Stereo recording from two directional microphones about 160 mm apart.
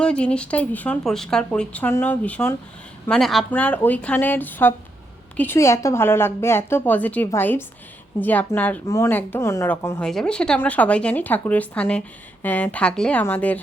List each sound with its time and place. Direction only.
0.0 s speech: 5° left (ahead or behind)
3.1 s speech: centre (ahead or behind); by 10.0 s 15° left (ahead or behind)
10.0 s speech: 5° left (ahead or behind)